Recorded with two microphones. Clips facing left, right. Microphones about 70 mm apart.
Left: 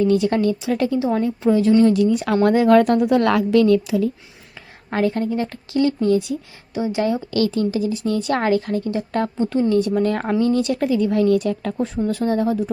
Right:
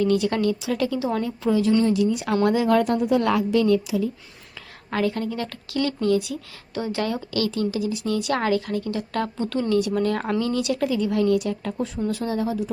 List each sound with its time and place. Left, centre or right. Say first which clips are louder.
0.0 s speech: left 4 dB; left
1.8 s a woman's voice: left 5 dB; left
4.9 s speech: left 4 dB; left